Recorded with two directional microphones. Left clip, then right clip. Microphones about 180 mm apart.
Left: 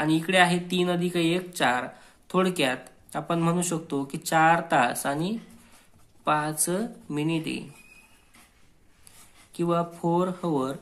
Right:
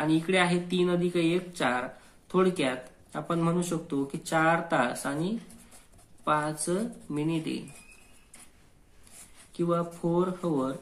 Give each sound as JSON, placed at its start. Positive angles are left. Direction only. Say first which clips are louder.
{"t": 0.0, "sound": "speech", "louder": "left 4 dB", "side_deg": 25}
{"t": 9.5, "sound": "speech", "louder": "left 3 dB", "side_deg": 25}